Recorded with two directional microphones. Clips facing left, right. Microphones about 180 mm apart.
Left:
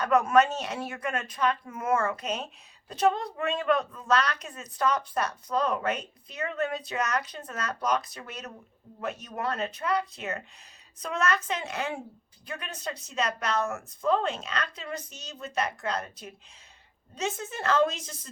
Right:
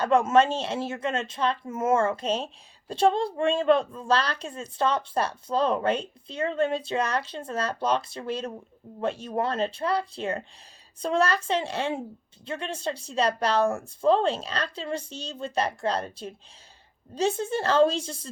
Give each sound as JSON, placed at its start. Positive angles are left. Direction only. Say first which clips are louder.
{"t": 0.0, "sound": "a woman's voice", "louder": "right 2 dB", "side_deg": -25}